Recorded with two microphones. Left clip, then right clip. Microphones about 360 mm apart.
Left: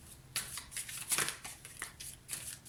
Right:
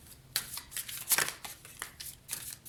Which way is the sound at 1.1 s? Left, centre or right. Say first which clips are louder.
Right 5 dB; centre.